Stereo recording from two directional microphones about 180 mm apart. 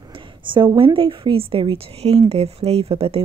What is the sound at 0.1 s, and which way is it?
A woman's voice, 25° right (ahead or behind).